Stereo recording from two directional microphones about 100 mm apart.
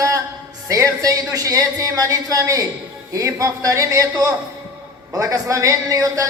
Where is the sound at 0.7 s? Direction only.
35° right (ahead or behind).